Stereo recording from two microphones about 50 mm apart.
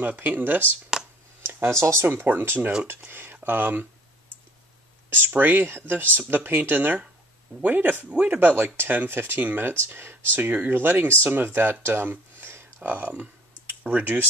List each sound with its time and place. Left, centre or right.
0.0 s speech: right
1.4 s speech: right
2.0 s speech: right
5.1 s speech: right
10.3 s speech: right
11.8 s a sound: right
12.8 s speech: right